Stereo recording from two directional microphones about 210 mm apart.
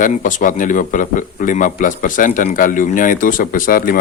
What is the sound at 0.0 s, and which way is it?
Speech, 40° left (ahead or behind).